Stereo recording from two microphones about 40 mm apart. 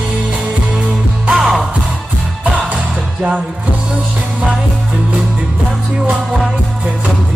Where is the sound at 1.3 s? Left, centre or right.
Right.